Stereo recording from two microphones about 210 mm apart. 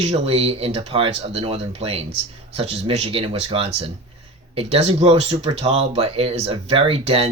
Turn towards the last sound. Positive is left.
turn(degrees=-30)  # may be behind; listen again after turning